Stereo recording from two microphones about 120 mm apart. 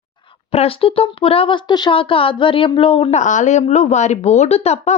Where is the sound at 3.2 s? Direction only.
90° left; by 5.0 s 65° left (ahead or behind).